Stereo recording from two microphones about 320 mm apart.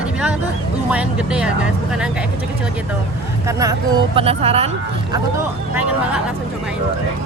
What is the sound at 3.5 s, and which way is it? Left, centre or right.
Speech, centre.